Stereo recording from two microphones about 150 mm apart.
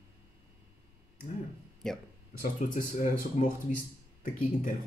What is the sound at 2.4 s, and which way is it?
Speech, 65° left (ahead or behind).